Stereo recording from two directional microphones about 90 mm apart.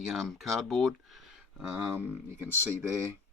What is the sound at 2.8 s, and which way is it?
Speech, 35° right (ahead or behind).